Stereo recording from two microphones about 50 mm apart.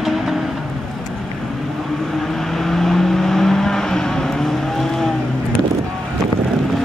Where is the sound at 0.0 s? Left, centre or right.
Centre.